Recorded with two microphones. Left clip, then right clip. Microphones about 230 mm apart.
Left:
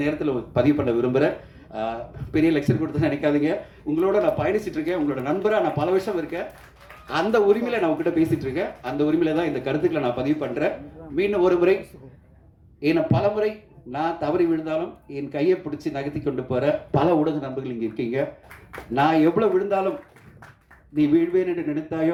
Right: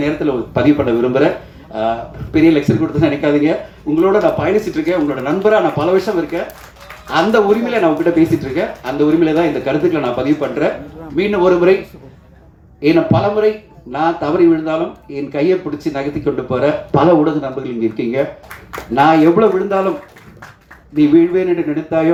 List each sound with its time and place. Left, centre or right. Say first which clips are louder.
0.0 s speech: right 7 dB; left
12.8 s speech: right 8 dB; left
20.9 s speech: right 9 dB; left